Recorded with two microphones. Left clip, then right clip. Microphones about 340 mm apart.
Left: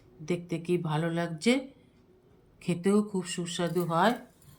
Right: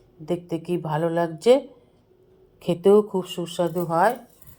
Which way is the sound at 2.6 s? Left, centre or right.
Centre.